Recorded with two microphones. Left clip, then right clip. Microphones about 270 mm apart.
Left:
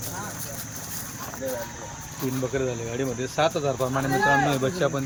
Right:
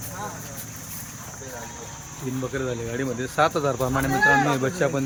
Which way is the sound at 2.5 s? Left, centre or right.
Centre.